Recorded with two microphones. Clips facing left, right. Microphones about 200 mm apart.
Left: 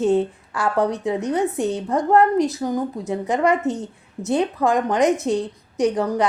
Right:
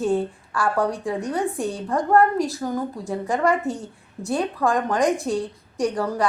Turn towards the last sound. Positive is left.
turn(degrees=20)  # may be behind; listen again after turning